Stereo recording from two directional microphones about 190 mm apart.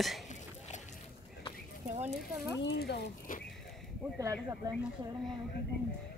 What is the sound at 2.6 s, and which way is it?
Speech, 60° left (ahead or behind).